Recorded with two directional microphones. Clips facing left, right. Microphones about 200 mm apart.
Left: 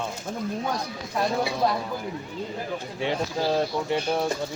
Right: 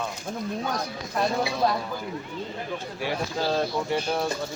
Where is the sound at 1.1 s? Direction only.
Centre (ahead or behind).